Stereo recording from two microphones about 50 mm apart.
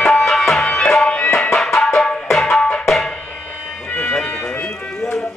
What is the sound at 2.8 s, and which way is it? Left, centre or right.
Tabla, centre.